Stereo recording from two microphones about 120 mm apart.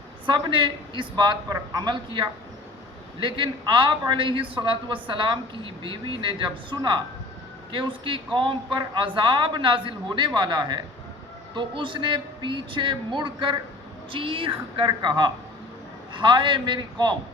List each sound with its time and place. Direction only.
0.3 s a woman's voice: 40° right (ahead or behind)